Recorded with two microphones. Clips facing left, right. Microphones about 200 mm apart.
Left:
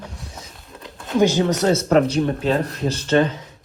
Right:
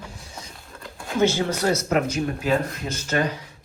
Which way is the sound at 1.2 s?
15° left (ahead or behind).